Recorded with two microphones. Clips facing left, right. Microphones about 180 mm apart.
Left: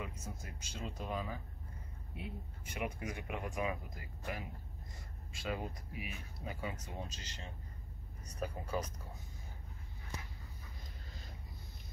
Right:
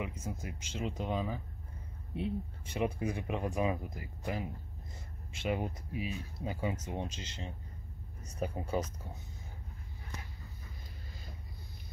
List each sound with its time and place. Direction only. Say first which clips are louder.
0.0 s speech: right 6 dB; 15° right (ahead or behind)
8.3 s speech: right 4 dB; 25° right (ahead or behind)